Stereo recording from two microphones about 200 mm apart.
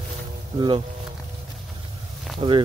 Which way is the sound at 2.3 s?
25° right (ahead or behind).